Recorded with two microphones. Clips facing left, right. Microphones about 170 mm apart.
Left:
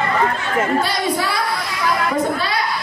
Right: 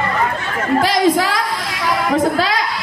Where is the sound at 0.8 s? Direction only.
90° right.